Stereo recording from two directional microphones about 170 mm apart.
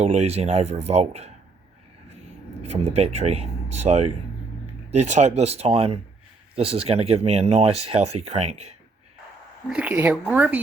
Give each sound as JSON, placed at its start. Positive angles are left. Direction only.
{"t": 0.0, "sound": "speech", "side_deg": -40}
{"t": 2.6, "sound": "speech", "side_deg": -40}
{"t": 9.6, "sound": "speech", "side_deg": -5}